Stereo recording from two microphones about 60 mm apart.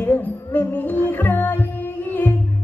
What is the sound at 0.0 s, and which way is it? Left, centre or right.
Music, left.